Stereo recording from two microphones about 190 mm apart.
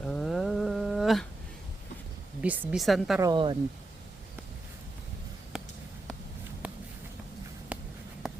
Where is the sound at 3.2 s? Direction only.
25° right (ahead or behind).